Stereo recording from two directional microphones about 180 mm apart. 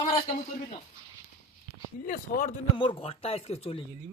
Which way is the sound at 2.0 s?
50° left (ahead or behind).